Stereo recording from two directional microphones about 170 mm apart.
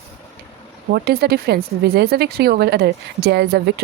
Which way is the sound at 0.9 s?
65° right (ahead or behind).